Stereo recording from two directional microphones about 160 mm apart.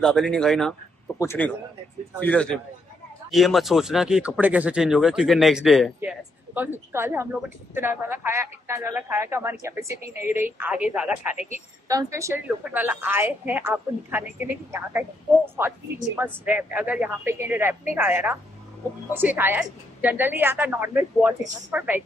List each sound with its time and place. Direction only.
0.0 s speech: 5° left (ahead or behind)
1.2 s a man's voice: 15° left (ahead or behind); by 5.9 s centre (ahead or behind)
5.9 s a woman's voice: 10° right (ahead or behind)
11.9 s a woman's voice: 20° right (ahead or behind)
16.2 s a woman's voice: 10° right (ahead or behind)